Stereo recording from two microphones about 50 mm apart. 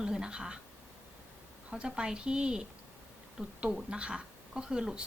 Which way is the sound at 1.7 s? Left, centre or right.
Centre.